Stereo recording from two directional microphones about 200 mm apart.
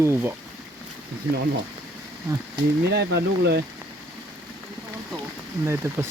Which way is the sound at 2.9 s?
55° right (ahead or behind).